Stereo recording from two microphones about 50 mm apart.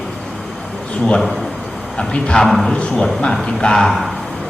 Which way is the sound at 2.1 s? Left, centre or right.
Left.